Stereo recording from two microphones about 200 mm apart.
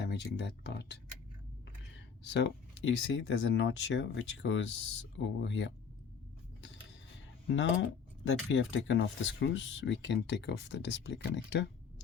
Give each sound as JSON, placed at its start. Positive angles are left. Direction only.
{"t": 0.0, "sound": "speech", "side_deg": 60}
{"t": 7.4, "sound": "speech", "side_deg": 65}